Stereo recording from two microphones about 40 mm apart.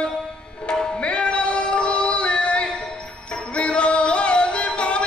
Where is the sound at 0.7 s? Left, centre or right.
Left.